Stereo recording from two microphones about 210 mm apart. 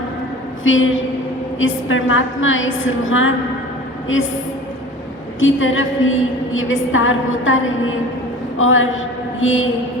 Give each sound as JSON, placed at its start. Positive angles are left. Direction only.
{"t": 0.6, "sound": "a woman's voice", "side_deg": 70}
{"t": 5.4, "sound": "a woman's voice", "side_deg": 65}